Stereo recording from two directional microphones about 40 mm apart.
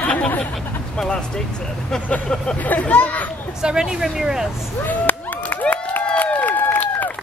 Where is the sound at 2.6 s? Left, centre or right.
Left.